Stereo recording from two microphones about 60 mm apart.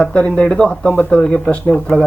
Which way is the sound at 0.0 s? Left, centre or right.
Centre.